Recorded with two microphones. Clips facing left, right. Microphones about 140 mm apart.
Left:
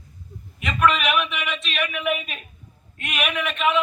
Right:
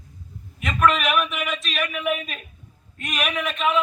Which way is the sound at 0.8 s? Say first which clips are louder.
Even; 40° right (ahead or behind).